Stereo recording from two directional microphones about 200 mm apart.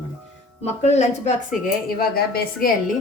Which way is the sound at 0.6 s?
35° left (ahead or behind).